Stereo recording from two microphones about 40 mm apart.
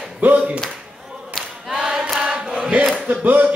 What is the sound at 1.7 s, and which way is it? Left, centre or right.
Choir, centre.